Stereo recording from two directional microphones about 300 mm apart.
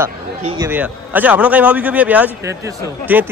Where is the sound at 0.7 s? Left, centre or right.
Centre.